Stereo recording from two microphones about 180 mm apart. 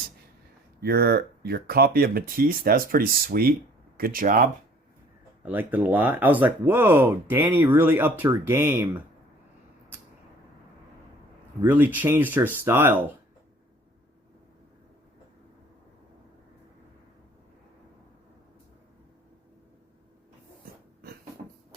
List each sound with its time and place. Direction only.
0.8 s speech: 60° right (ahead or behind)
5.5 s speech: 10° right (ahead or behind)
11.6 s speech: 10° right (ahead or behind)